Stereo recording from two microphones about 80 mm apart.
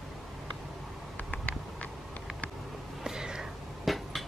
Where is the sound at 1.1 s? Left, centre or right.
Centre.